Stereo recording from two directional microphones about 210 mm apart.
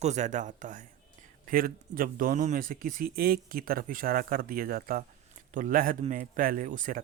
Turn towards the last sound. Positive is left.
turn(degrees=-40)  # may be behind; listen again after turning